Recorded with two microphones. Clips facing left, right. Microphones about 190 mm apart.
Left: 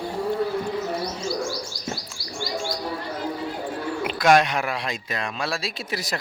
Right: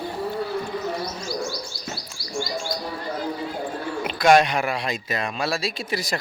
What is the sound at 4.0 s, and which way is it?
Speech, centre (ahead or behind).